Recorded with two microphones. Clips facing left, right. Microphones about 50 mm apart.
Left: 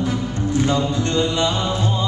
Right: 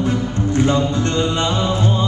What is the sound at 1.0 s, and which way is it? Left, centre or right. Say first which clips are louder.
Music: right 1 dB; right.